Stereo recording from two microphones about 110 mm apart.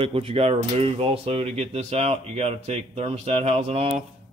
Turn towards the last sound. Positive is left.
turn(degrees=-65)  # may be behind; listen again after turning